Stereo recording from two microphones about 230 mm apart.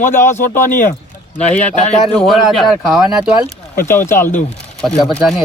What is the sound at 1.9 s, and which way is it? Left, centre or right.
Speech, centre.